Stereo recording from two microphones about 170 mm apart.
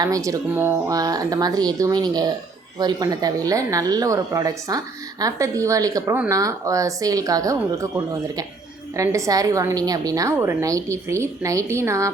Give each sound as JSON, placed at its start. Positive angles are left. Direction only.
{"t": 0.0, "sound": "a woman's voice", "side_deg": -20}